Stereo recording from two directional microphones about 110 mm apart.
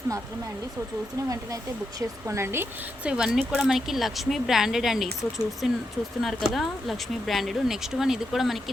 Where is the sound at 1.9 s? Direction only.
25° right (ahead or behind).